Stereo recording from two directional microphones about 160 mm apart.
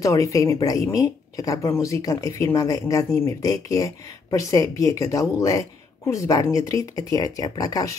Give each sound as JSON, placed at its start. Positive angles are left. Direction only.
{"t": 0.0, "sound": "speech", "side_deg": 20}